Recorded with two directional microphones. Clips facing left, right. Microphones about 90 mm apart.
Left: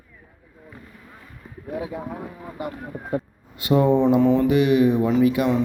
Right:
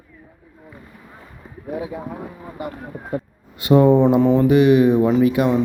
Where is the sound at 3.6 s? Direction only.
35° right (ahead or behind).